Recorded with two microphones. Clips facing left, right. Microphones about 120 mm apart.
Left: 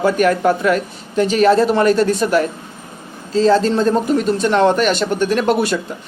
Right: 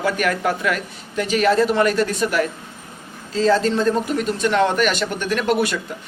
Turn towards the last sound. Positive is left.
turn(degrees=30)  # may be behind; listen again after turning